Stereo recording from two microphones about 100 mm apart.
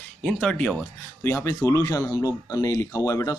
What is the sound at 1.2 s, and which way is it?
Speech, 30° left (ahead or behind).